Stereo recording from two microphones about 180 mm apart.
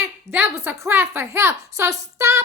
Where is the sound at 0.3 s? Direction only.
10° right (ahead or behind).